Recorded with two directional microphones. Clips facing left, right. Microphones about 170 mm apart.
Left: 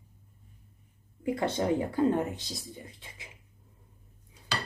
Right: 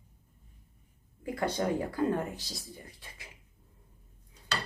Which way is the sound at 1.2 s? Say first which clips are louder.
Left 2 dB; 25° left (ahead or behind).